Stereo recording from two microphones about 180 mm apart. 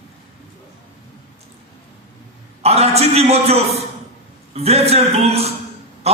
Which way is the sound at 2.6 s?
35° right (ahead or behind).